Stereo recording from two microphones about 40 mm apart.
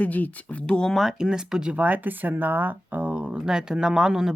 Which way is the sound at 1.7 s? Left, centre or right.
Right.